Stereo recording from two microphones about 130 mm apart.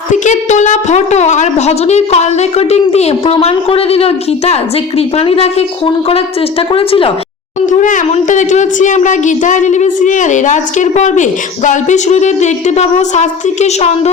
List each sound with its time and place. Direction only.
0.1 s a woman's voice: 65° left (ahead or behind); by 7.1 s 45° left (ahead or behind)
7.7 s speech: 75° left (ahead or behind); by 14.1 s 55° left (ahead or behind)